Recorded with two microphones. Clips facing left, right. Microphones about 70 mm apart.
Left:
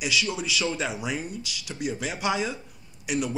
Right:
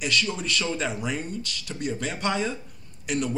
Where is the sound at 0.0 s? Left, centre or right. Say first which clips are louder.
Even; centre.